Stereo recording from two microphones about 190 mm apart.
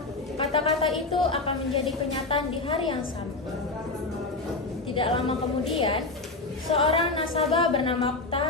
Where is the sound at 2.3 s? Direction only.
25° left (ahead or behind).